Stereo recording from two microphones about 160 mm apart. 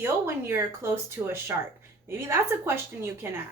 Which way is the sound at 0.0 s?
15° right (ahead or behind).